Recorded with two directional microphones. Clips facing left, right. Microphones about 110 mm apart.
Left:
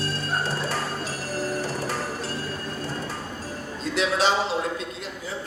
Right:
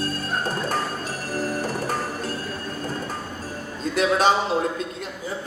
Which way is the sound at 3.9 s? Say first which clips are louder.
Right 3 dB; 45° right (ahead or behind).